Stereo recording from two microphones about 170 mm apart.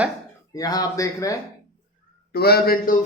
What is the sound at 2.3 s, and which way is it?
Speech, 65° left (ahead or behind).